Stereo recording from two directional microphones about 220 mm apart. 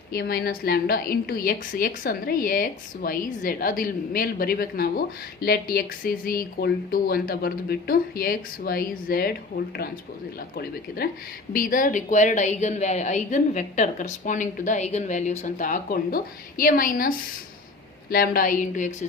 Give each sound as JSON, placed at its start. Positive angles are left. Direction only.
{"t": 0.1, "sound": "a woman's voice", "side_deg": 45}
{"t": 10.6, "sound": "a woman's voice", "side_deg": 45}